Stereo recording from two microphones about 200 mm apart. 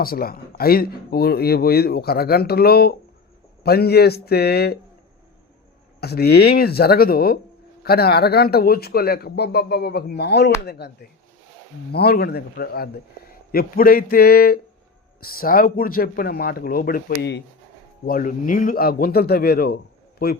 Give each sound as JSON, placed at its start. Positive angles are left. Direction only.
{"t": 0.0, "sound": "speech", "side_deg": 50}
{"t": 6.0, "sound": "speech", "side_deg": 55}